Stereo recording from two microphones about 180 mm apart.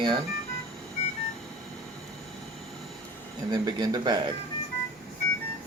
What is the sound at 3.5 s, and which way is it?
Speech, 25° right (ahead or behind).